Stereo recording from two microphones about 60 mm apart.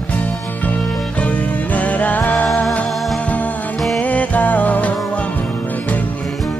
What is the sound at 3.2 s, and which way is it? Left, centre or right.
Music, left.